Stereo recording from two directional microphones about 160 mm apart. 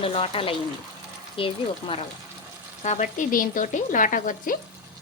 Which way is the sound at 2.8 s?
50° left (ahead or behind).